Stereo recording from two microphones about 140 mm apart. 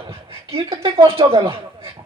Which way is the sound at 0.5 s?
40° right (ahead or behind).